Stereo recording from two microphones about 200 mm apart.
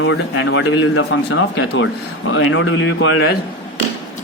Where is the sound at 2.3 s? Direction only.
80° left.